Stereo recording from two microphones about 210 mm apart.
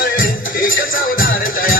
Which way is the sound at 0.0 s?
40° left (ahead or behind).